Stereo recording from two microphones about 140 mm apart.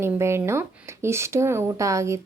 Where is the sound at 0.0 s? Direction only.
20° right (ahead or behind).